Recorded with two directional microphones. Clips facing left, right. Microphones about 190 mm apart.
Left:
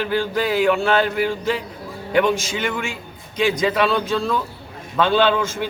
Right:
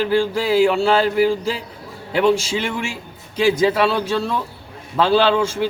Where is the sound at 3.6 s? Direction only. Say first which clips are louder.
Right 2 dB; 30° right (ahead or behind).